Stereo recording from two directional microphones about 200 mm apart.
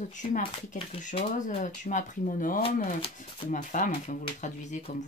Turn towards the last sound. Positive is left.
turn(degrees=35)  # may be behind; listen again after turning